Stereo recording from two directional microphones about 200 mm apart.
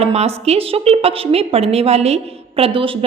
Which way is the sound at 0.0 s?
30° right (ahead or behind).